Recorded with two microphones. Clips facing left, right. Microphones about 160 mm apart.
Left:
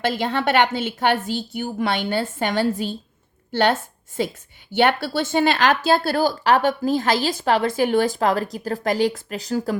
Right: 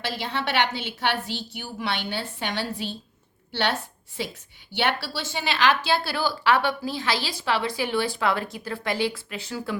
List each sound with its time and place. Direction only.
0.0 s a woman's voice: 50° left (ahead or behind)